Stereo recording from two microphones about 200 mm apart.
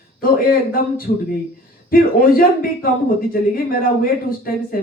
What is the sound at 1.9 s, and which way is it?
Speech, 45° left (ahead or behind).